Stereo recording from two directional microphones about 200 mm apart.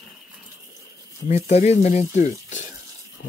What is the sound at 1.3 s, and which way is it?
Speech, 35° left (ahead or behind).